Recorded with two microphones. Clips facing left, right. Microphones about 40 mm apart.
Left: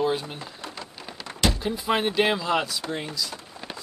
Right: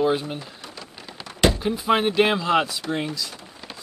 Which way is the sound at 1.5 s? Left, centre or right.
Centre.